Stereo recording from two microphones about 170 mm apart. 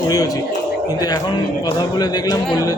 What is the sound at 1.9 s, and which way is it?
Speech, 25° left (ahead or behind).